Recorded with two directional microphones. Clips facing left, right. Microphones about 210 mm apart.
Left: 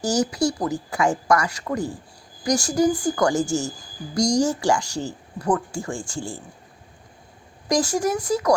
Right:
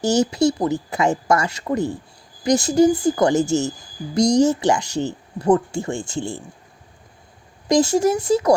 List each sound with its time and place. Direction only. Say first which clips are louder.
0.0 s speech: right 4 dB; 25° right (ahead or behind)
7.7 s speech: right 5 dB; 25° right (ahead or behind)